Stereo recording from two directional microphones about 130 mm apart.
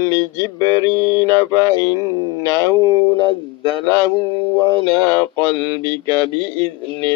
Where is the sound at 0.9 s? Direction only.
25° left (ahead or behind).